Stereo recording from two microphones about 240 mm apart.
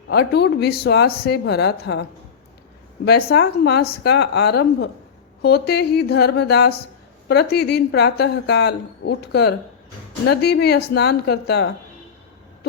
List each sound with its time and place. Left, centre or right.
0.1 s speech: left